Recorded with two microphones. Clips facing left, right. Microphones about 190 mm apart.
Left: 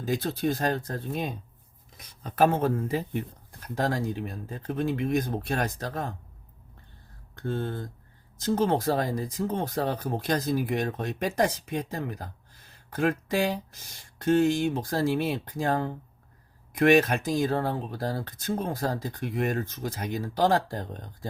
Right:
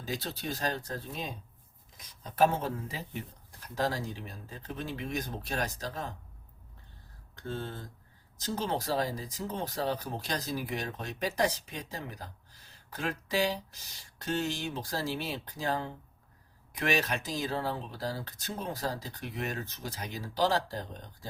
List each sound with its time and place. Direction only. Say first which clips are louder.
0.0 s speech: left 9 dB; 50° left (ahead or behind)
7.3 s speech: left 7 dB; 55° left (ahead or behind)